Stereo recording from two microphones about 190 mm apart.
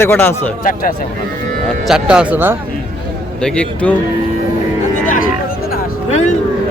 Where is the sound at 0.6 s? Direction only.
45° left (ahead or behind).